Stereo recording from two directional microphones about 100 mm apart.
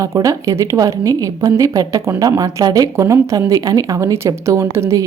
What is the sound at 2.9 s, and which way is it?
A woman's voice, 30° right (ahead or behind).